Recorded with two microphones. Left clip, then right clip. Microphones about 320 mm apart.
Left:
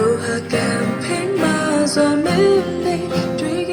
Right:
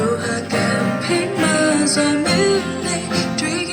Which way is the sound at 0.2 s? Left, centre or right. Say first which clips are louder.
Even; left.